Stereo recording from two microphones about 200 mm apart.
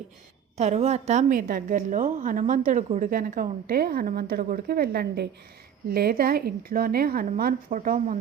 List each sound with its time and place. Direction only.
0.5 s a woman's voice: 35° right (ahead or behind)